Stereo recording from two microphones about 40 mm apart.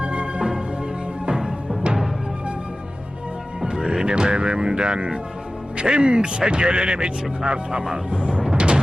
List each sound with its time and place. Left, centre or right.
0.0 s music: right
3.7 s speech: centre